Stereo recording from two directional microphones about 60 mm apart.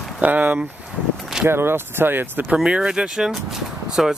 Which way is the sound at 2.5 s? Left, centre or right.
Centre.